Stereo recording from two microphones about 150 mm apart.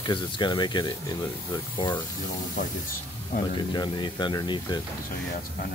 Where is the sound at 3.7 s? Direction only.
30° left (ahead or behind).